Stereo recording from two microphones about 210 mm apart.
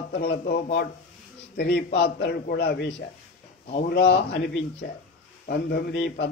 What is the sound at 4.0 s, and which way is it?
Speech, 55° left (ahead or behind).